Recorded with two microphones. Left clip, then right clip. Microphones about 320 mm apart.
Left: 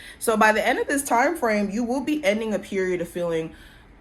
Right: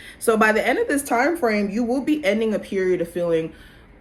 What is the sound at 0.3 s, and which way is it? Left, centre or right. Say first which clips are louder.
A woman's voice: right 1 dB; left.